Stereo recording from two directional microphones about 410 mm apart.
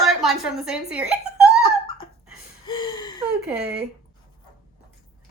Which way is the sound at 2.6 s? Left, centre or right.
Centre.